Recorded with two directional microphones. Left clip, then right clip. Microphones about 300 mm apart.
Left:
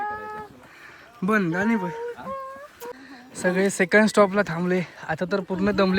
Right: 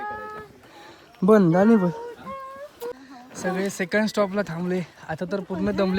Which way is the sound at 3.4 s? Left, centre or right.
Centre.